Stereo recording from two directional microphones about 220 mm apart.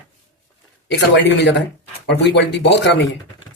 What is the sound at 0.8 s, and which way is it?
Speech, 50° left (ahead or behind).